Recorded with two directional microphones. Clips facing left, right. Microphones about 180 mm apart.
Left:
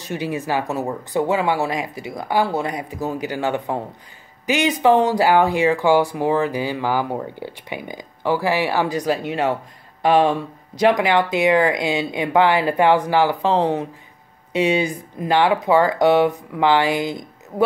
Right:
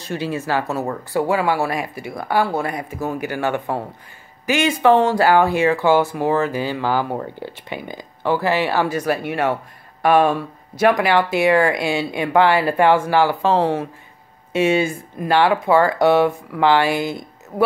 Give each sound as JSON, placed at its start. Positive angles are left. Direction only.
{"t": 0.0, "sound": "speech", "side_deg": 15}